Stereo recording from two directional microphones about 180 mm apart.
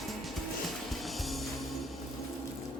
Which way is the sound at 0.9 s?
Centre (ahead or behind).